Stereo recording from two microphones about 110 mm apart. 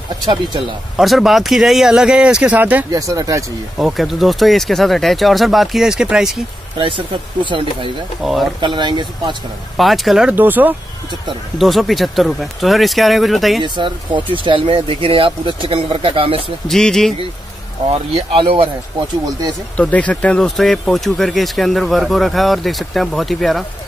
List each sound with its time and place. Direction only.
0.9 s speech: centre (ahead or behind)
2.9 s speech: 30° right (ahead or behind)
3.7 s speech: centre (ahead or behind)
7.4 s speech: 50° right (ahead or behind)
8.2 s speech: 5° right (ahead or behind)
8.5 s speech: 45° right (ahead or behind)
9.8 s speech: centre (ahead or behind)
10.3 s speech: 15° right (ahead or behind)
11.5 s speech: centre (ahead or behind)
13.6 s speech: 50° right (ahead or behind)
16.6 s speech: 5° left (ahead or behind)
18.1 s speech: 55° right (ahead or behind)
19.8 s speech: 10° left (ahead or behind)